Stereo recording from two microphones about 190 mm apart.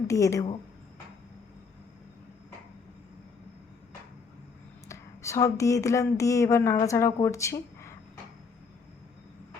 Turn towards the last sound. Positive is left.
turn(degrees=15)  # may be behind; listen again after turning